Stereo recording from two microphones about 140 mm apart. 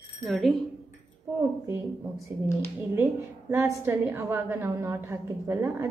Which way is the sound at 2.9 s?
15° right (ahead or behind).